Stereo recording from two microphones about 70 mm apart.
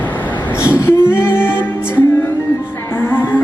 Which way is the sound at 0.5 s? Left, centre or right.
Left.